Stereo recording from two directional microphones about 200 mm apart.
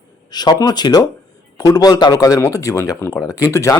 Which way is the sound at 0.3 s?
20° left (ahead or behind).